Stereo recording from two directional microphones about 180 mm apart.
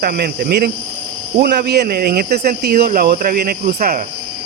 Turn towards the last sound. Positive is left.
turn(degrees=-55)  # may be behind; listen again after turning